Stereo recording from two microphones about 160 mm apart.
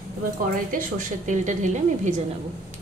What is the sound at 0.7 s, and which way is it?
A woman's voice, 55° right (ahead or behind).